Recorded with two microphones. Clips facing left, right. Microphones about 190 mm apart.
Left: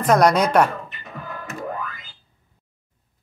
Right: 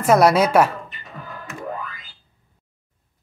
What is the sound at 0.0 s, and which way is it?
Speech, 5° right (ahead or behind).